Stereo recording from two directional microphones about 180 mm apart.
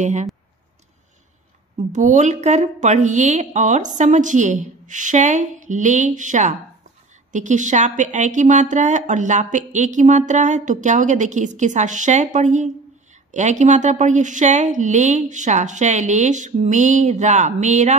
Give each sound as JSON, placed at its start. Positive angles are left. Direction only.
{"t": 0.0, "sound": "a woman's voice", "side_deg": -40}
{"t": 1.9, "sound": "a woman's voice", "side_deg": -45}